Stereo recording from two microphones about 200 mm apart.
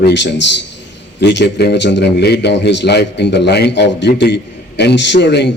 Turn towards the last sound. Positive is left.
turn(degrees=60)  # may be behind; listen again after turning